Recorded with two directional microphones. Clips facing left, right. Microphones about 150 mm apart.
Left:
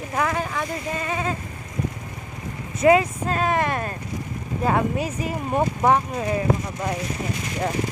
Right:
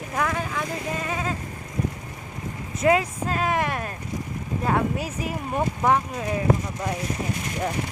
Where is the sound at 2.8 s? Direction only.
Centre (ahead or behind).